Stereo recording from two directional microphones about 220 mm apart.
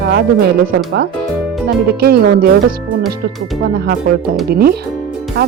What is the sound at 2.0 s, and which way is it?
Speech, 45° right (ahead or behind).